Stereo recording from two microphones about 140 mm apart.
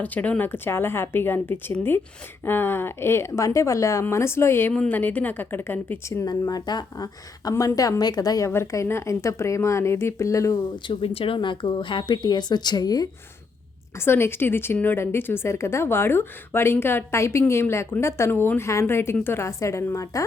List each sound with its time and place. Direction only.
0.0 s a woman's voice: 10° left (ahead or behind)
6.2 s speech: 30° left (ahead or behind)
10.8 s speech: 40° left (ahead or behind)
14.0 s a woman's voice: 15° left (ahead or behind)